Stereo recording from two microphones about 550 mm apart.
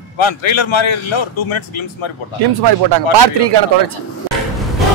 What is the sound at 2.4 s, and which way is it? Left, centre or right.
Speech, right.